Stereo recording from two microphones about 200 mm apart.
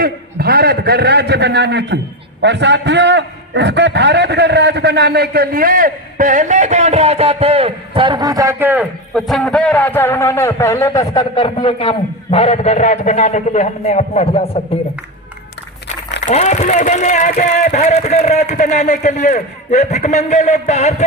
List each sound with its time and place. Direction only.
0.0 s a man's voice: 50° right (ahead or behind); by 14.6 s 30° left (ahead or behind)
16.2 s a man's voice: 35° left (ahead or behind)